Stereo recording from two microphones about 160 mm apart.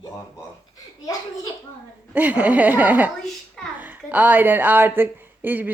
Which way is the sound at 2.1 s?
10° right (ahead or behind).